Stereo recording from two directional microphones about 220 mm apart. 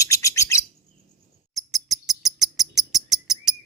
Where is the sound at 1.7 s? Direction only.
Centre (ahead or behind).